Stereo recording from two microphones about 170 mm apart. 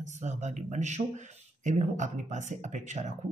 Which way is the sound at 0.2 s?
45° right (ahead or behind).